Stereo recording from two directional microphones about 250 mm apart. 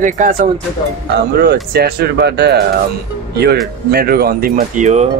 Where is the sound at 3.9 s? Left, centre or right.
Right.